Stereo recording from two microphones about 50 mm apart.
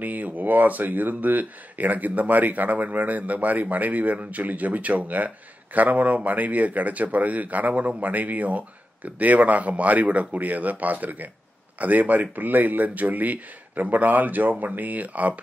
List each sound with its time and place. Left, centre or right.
0.0 s speech: right